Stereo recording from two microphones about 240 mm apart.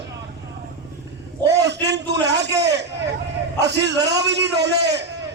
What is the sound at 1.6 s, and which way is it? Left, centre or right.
A man's voice, right.